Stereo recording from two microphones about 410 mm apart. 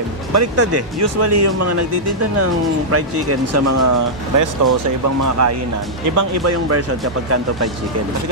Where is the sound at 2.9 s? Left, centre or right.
Right.